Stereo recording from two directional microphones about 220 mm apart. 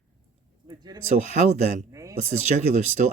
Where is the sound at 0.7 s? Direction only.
20° right (ahead or behind).